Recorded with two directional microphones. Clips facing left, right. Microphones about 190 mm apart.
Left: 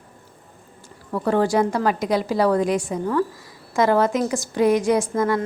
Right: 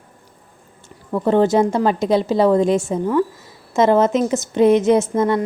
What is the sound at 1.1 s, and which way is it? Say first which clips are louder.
Speech: right 4 dB; 20° right (ahead or behind).